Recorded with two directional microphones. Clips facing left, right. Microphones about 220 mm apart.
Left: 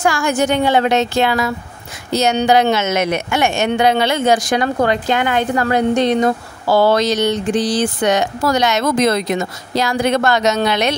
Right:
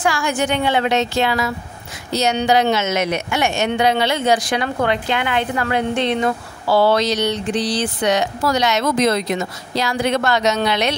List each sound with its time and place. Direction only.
0.0 s speech: 45° left (ahead or behind)